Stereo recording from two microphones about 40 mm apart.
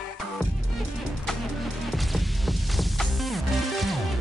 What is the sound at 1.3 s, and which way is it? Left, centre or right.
Music, centre.